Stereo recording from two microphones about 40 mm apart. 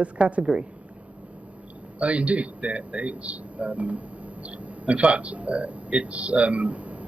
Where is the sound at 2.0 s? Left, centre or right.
Right.